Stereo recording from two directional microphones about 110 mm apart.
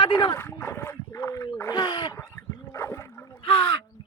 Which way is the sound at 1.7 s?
45° left (ahead or behind).